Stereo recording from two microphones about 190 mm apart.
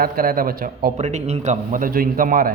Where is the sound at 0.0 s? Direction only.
50° right (ahead or behind).